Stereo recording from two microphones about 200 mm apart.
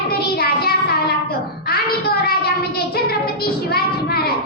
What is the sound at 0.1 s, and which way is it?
Child singing, 50° left (ahead or behind).